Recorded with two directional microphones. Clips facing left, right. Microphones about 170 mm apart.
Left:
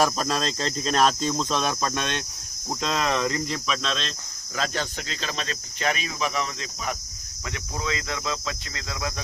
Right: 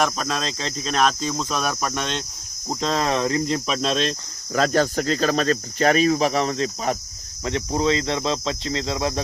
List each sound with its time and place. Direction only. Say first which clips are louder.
0.0 s speech: even; centre (ahead or behind); by 2.2 s 15° right (ahead or behind)
3.0 s speech: right 3 dB; 35° right (ahead or behind)
7.4 s cricket: right 10 dB; 30° right (ahead or behind)